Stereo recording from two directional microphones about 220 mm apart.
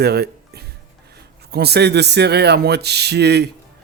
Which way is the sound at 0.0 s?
45° right (ahead or behind).